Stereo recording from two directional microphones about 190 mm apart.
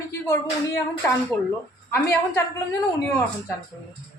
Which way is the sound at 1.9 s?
15° left (ahead or behind).